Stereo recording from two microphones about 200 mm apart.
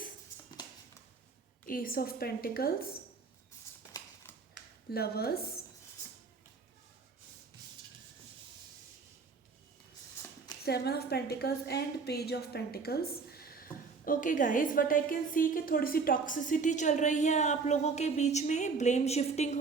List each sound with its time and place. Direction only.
1.6 s a woman's voice: 45° left (ahead or behind)
3.9 s a sound: 15° left (ahead or behind)
4.9 s a woman's voice: 50° left (ahead or behind)
10.7 s a woman's voice: 55° left (ahead or behind); by 19.5 s 35° left (ahead or behind)